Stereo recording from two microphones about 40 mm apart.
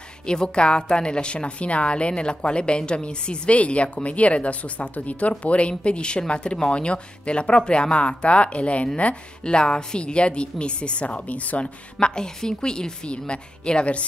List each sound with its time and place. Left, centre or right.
0.3 s a woman's voice: left